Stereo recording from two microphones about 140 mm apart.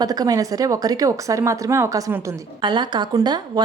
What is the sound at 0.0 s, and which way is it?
A woman's voice, 25° right (ahead or behind).